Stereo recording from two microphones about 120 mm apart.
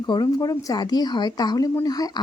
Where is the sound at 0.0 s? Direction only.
35° left (ahead or behind).